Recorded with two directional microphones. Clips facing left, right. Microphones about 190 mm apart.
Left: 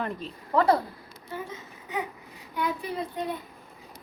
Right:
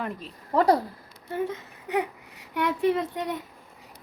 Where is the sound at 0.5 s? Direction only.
40° right (ahead or behind).